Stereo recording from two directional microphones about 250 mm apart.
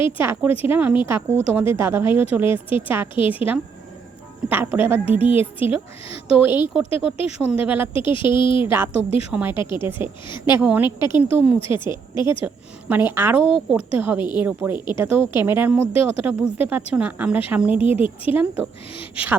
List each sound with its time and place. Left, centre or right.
0.2 s a woman's voice: centre
7.2 s a woman's voice: left
7.6 s a woman's voice: centre
7.9 s a woman's voice: centre
8.6 s a woman's voice: centre
8.9 s a woman's voice: left
9.3 s a woman's voice: centre
10.8 s a woman's voice: centre
12.9 s a woman's voice: centre